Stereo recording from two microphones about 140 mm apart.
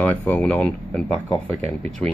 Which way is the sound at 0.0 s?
10° left (ahead or behind).